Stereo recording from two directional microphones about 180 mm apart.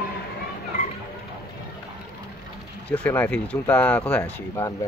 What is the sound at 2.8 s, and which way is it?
A man's voice, 5° left (ahead or behind).